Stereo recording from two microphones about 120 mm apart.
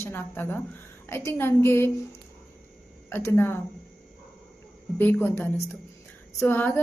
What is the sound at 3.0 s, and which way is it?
Speech, 20° left (ahead or behind).